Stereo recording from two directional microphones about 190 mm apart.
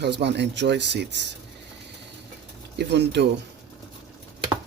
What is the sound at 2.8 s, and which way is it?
Speech, 65° right (ahead or behind).